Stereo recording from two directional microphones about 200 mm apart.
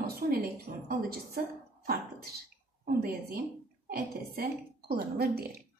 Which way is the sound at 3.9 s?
50° right (ahead or behind).